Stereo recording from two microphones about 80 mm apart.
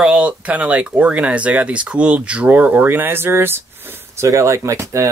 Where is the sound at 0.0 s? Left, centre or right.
Centre.